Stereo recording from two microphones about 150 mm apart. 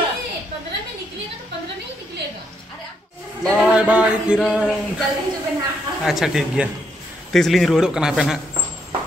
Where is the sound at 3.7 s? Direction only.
5° right (ahead or behind).